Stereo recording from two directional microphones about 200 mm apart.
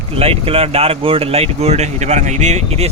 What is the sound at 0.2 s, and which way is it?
Speech, 30° right (ahead or behind).